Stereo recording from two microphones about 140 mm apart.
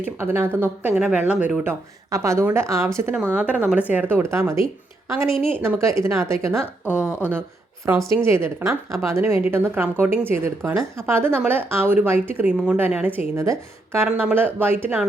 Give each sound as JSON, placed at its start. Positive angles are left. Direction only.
{"t": 0.0, "sound": "a woman's voice", "side_deg": -15}
{"t": 2.0, "sound": "a woman's voice", "side_deg": -20}
{"t": 7.0, "sound": "speech", "side_deg": 20}
{"t": 8.2, "sound": "a woman's voice", "side_deg": -20}